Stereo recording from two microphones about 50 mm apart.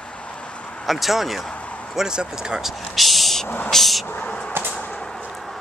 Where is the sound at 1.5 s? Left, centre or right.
Left.